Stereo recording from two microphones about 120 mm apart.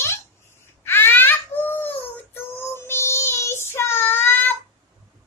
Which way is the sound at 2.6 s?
20° left (ahead or behind).